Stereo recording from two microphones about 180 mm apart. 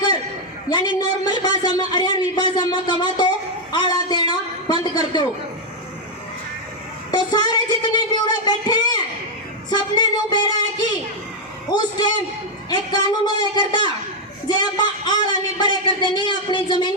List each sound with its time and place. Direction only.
0.7 s a man's voice: 25° left (ahead or behind)
7.1 s a man's voice: 25° left (ahead or behind)